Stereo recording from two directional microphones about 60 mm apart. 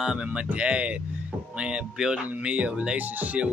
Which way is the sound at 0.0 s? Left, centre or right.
Centre.